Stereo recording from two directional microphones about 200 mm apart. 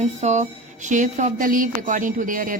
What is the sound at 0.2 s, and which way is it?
Speech, 35° right (ahead or behind).